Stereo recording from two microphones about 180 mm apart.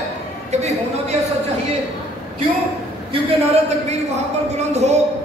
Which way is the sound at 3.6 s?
40° right (ahead or behind).